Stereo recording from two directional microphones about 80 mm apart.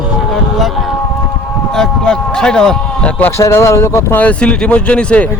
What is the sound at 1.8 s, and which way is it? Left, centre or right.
A man's voice, centre.